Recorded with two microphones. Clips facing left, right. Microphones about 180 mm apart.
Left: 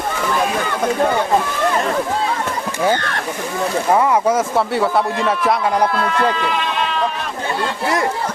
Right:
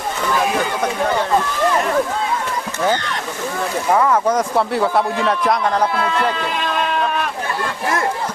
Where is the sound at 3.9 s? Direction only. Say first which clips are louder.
Even; 10° left (ahead or behind).